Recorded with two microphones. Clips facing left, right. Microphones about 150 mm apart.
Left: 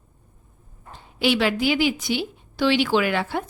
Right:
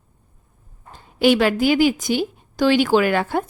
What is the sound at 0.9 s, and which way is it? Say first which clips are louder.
A woman's voice: right 6 dB; 45° right (ahead or behind).